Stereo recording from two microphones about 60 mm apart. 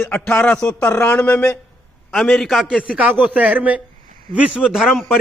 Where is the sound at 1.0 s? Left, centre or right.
Left.